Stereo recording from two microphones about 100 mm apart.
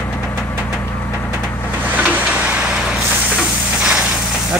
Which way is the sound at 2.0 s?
15° right (ahead or behind).